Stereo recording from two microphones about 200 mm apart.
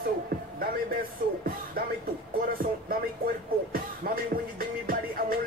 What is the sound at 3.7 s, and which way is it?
Music, 45° right (ahead or behind).